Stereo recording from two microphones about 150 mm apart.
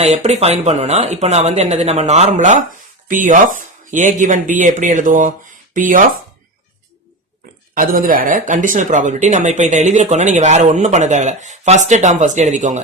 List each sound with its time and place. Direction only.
0.0 s speech: 45° right (ahead or behind); by 6.1 s 65° right (ahead or behind)
7.8 s speech: 70° right (ahead or behind); by 12.8 s 50° right (ahead or behind)